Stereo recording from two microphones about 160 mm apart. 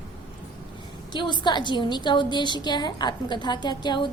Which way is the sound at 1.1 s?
30° left (ahead or behind).